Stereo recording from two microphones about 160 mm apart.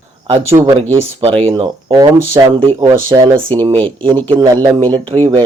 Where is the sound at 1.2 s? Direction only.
40° right (ahead or behind).